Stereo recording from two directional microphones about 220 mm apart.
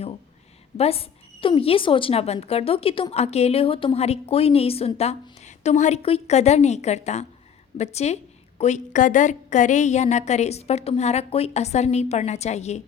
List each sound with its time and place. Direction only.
0.8 s a woman's voice: 25° left (ahead or behind)